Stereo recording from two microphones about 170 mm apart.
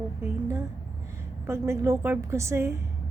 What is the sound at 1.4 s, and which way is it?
A woman's voice, 15° right (ahead or behind).